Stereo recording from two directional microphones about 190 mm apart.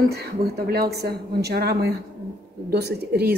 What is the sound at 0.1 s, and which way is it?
A woman's voice, 55° right (ahead or behind).